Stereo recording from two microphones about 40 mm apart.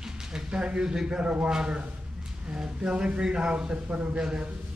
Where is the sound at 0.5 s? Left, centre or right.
Right.